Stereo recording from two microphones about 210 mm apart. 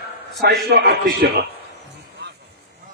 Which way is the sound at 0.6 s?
50° right (ahead or behind).